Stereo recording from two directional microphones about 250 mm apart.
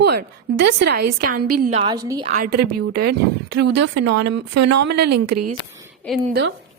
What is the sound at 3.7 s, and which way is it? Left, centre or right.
Speech, right.